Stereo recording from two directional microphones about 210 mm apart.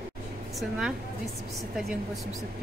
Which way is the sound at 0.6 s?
5° right (ahead or behind).